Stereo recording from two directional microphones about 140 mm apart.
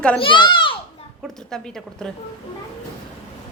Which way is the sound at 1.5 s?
5° left (ahead or behind).